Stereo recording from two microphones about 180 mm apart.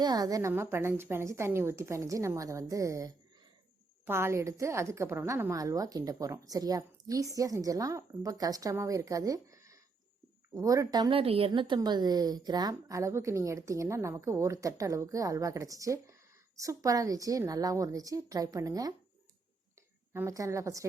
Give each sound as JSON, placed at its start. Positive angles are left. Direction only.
{"t": 0.0, "sound": "a woman's voice", "side_deg": -20}
{"t": 20.1, "sound": "speech", "side_deg": -15}